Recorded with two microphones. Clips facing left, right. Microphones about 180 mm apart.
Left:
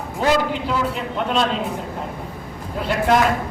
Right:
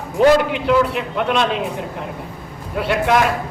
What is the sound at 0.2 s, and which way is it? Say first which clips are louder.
A man's voice: right 6 dB; 70° right (ahead or behind).